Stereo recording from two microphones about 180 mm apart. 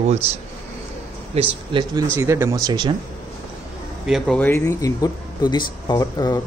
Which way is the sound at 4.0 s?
Centre (ahead or behind).